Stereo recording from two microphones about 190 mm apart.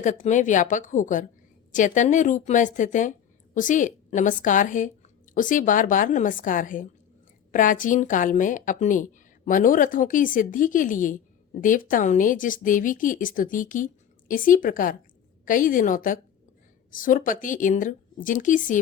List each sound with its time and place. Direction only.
0.0 s speech: 40° left (ahead or behind)